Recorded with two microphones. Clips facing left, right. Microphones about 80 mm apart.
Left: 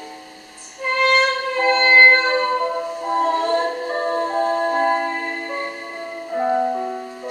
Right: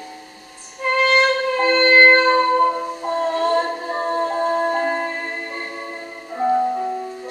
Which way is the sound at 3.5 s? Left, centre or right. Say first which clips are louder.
Even; centre.